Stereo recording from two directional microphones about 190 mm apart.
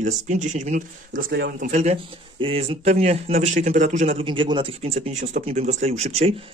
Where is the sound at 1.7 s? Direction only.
35° right (ahead or behind).